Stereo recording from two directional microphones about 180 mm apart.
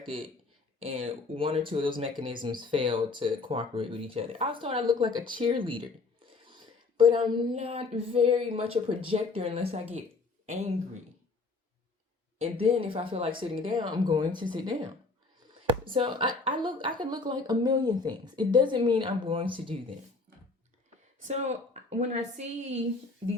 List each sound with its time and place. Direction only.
0.0 s speech: 30° right (ahead or behind)
6.6 s a sound: 30° right (ahead or behind)
10.4 s speech: 35° right (ahead or behind)
12.4 s speech: 30° right (ahead or behind)
15.8 s speech: 30° right (ahead or behind)
21.2 s a sound: 40° right (ahead or behind)